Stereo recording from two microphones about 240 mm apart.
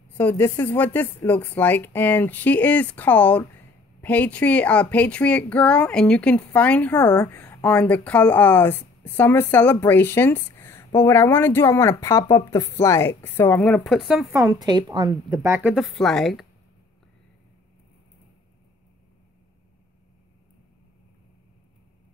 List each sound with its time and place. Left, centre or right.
0.2 s speech: centre